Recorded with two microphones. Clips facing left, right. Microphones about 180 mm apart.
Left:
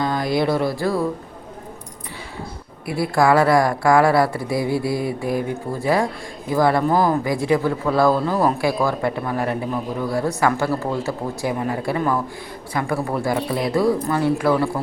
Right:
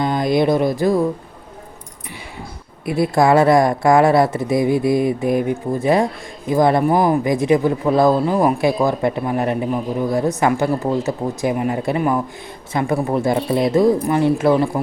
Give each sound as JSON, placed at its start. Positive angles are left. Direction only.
{"t": 0.0, "sound": "speech", "side_deg": -20}
{"t": 2.8, "sound": "speech", "side_deg": -20}